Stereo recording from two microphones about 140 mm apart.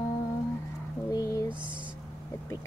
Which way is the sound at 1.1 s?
25° left (ahead or behind).